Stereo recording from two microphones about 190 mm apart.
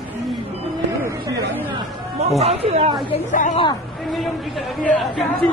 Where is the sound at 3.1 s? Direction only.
40° left (ahead or behind).